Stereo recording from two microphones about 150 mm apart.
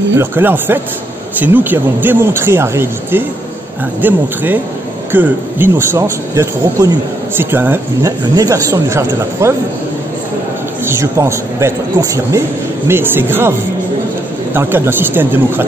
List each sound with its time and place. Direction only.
0.2 s a man's voice: 15° right (ahead or behind)
10.9 s a man's voice: 20° right (ahead or behind)